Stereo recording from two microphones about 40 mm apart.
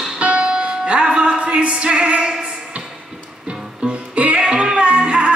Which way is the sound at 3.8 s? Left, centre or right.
Right.